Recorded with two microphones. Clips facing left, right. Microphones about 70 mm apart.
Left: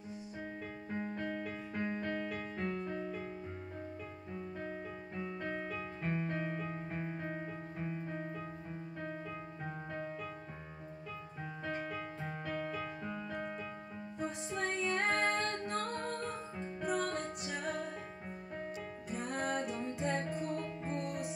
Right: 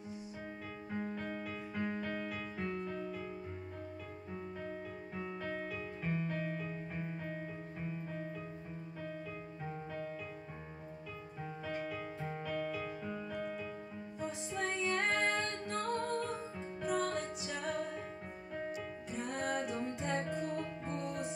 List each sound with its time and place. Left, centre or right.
1.1 s music: centre
5.4 s music: centre
11.8 s music: centre
19.0 s music: centre